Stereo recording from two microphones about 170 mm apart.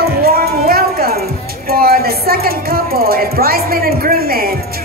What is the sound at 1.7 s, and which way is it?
Speech, 65° right (ahead or behind).